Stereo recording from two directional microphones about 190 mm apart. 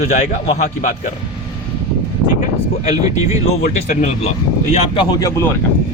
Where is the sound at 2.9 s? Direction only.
20° right (ahead or behind).